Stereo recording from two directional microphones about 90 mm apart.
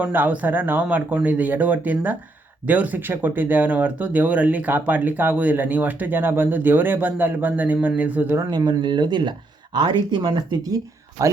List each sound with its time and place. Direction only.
0.0 s speech: 20° right (ahead or behind)
8.4 s speech: 50° right (ahead or behind)
11.2 s speech: 40° right (ahead or behind)